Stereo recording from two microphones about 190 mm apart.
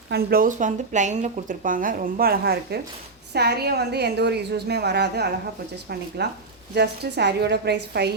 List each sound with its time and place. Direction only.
0.1 s a woman's voice: 50° right (ahead or behind)